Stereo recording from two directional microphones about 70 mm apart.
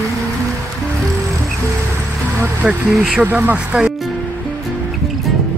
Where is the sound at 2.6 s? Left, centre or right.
Centre.